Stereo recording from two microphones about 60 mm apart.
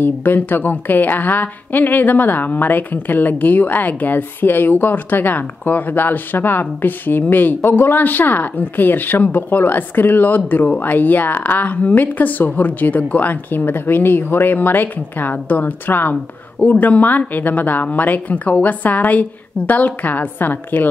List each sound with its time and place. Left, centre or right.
0.0 s a woman's voice: left